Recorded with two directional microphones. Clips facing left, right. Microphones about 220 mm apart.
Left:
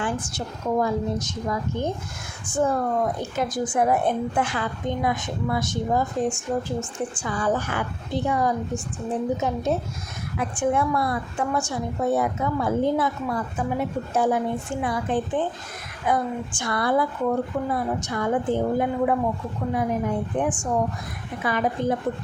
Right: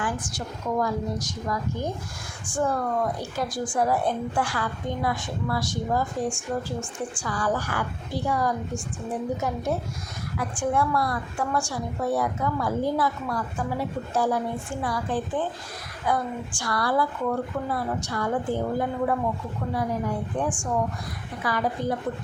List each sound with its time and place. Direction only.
0.0 s speech: 25° left (ahead or behind)